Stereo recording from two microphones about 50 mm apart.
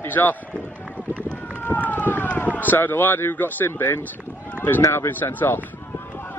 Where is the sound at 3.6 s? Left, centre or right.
Left.